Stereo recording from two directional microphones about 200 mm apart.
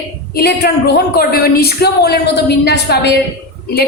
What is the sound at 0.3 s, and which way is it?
A woman's voice, 50° left (ahead or behind).